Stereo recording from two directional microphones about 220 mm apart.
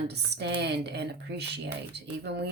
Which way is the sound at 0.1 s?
50° right (ahead or behind).